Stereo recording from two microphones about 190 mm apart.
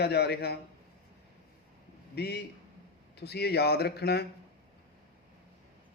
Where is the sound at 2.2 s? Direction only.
60° left (ahead or behind).